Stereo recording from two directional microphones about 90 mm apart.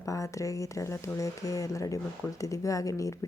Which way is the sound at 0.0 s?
35° left (ahead or behind).